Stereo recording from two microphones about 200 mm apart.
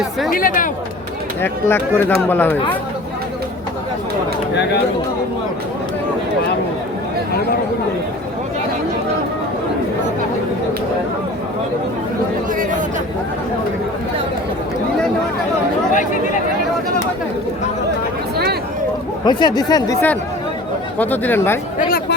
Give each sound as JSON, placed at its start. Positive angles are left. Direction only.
{"t": 0.3, "sound": "speech", "side_deg": 45}
{"t": 1.4, "sound": "speech", "side_deg": 10}
{"t": 15.9, "sound": "speech", "side_deg": 40}
{"t": 19.2, "sound": "speech", "side_deg": 20}
{"t": 21.8, "sound": "speech", "side_deg": 45}